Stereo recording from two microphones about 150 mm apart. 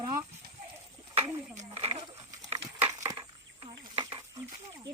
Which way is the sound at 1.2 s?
40° right (ahead or behind).